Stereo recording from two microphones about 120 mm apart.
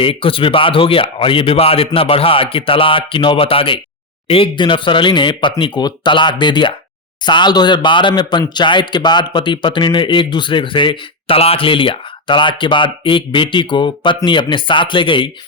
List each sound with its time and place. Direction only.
0.0 s a man's voice: 50° left (ahead or behind)